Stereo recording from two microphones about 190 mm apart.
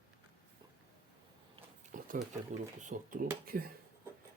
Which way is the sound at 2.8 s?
45° right (ahead or behind).